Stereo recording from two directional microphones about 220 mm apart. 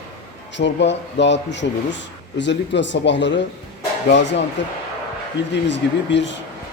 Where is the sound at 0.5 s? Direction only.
55° left (ahead or behind).